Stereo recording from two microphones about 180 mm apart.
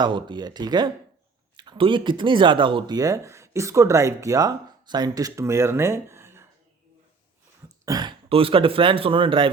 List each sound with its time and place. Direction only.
0.0 s speech: 25° right (ahead or behind)
7.9 s speech: 25° right (ahead or behind)